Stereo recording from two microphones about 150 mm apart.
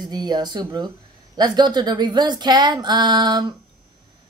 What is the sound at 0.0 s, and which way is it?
Speech, 25° right (ahead or behind).